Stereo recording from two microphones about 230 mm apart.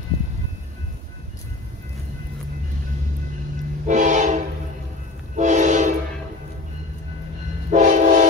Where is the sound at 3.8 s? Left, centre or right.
Right.